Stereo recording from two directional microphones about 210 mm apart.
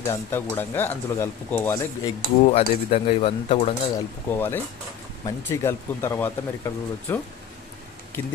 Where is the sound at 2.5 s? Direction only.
30° left (ahead or behind).